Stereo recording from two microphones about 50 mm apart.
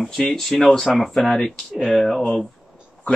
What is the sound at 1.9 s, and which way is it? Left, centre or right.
Speech, centre.